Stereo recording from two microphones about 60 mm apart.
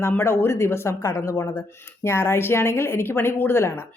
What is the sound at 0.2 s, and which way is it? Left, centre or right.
A woman's voice, left.